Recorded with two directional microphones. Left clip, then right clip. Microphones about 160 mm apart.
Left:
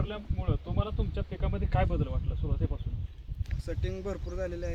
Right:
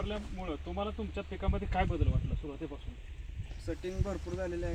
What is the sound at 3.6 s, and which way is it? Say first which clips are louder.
Speech: left 2 dB; 20° left (ahead or behind).